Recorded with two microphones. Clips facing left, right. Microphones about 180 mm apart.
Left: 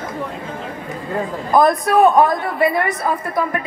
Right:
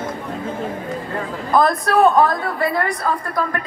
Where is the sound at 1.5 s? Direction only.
20° left (ahead or behind).